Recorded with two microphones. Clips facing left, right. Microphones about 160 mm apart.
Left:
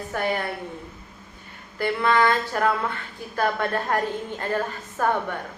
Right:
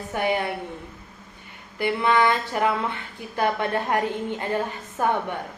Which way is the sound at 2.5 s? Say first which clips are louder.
Even; 15° right (ahead or behind).